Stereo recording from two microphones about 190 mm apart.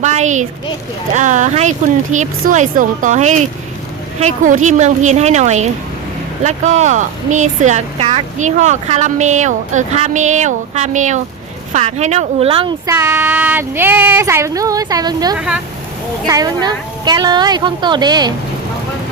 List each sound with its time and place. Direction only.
0.0 s speech: 40° right (ahead or behind); by 15.4 s 20° right (ahead or behind)
15.4 s speech: 5° right (ahead or behind)
16.2 s a woman's voice: 20° right (ahead or behind)